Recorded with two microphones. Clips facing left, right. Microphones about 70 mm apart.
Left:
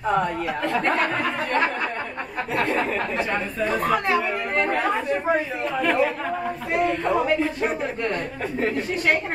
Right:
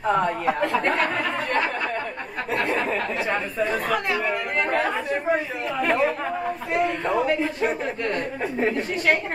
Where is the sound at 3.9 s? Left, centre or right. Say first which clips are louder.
Left 3 dB; left.